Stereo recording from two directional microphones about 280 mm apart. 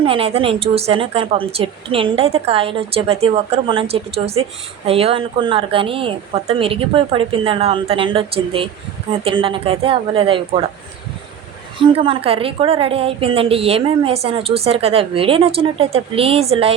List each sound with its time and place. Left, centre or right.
0.0 s a woman's voice: centre
11.8 s a woman's voice: centre